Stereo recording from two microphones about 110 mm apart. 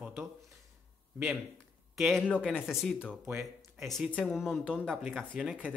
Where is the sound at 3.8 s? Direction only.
5° left (ahead or behind).